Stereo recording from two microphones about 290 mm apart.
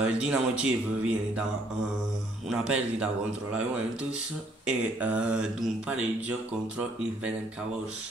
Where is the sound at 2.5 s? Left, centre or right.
Centre.